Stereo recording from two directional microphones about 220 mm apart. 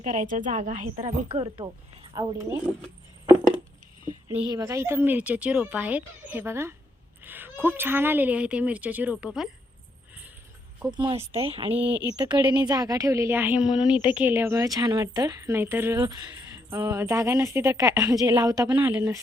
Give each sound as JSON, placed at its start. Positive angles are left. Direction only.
{"t": 0.0, "sound": "a woman's voice", "side_deg": -35}
{"t": 1.0, "sound": "speech", "side_deg": -25}
{"t": 2.1, "sound": "a woman's voice", "side_deg": -15}
{"t": 4.1, "sound": "a woman's voice", "side_deg": -10}
{"t": 10.9, "sound": "speech", "side_deg": -25}
{"t": 11.7, "sound": "a woman's voice", "side_deg": -10}